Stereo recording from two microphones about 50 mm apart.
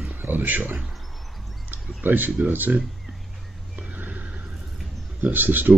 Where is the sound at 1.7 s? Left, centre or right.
Right.